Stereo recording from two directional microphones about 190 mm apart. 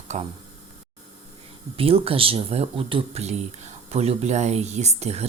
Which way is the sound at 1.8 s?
30° right (ahead or behind).